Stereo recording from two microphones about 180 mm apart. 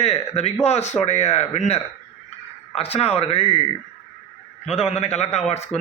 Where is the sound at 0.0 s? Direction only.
35° left (ahead or behind).